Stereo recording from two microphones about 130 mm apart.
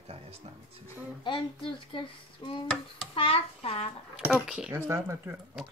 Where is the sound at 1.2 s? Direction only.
40° left (ahead or behind).